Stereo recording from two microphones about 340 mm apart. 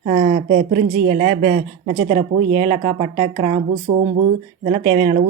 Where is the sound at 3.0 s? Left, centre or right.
Centre.